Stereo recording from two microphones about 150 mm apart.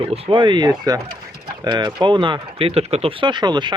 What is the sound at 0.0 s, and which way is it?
Speech, 35° right (ahead or behind).